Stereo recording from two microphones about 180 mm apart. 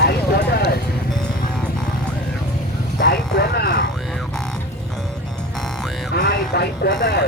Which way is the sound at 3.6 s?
60° left (ahead or behind).